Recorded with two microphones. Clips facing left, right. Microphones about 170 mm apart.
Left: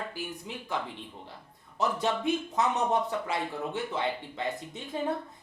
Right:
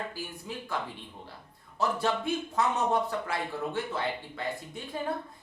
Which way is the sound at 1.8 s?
20° left (ahead or behind).